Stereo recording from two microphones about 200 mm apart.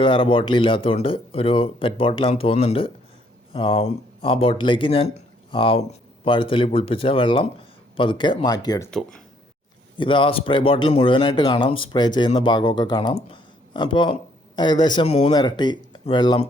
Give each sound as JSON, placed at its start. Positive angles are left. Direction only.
{"t": 0.0, "sound": "speech", "side_deg": 25}
{"t": 8.9, "sound": "speech", "side_deg": 5}
{"t": 10.0, "sound": "speech", "side_deg": 25}
{"t": 15.3, "sound": "speech", "side_deg": 20}